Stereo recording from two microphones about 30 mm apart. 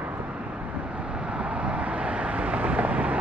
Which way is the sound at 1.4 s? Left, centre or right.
Right.